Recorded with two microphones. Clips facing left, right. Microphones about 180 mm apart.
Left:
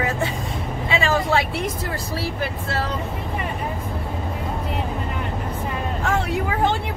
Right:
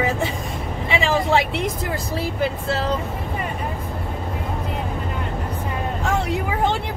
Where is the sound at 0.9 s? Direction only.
20° right (ahead or behind).